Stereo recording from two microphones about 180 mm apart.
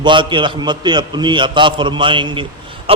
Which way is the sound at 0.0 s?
25° right (ahead or behind).